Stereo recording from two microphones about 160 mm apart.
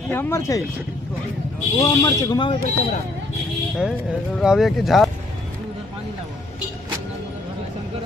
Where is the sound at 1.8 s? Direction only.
25° left (ahead or behind).